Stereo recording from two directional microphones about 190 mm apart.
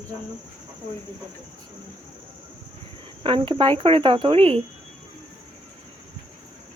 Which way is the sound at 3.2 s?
25° right (ahead or behind).